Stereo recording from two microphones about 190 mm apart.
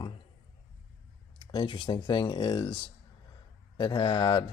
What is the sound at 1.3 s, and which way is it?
Speech, 25° left (ahead or behind).